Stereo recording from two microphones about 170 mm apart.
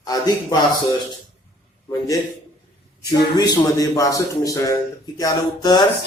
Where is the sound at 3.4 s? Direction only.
20° left (ahead or behind).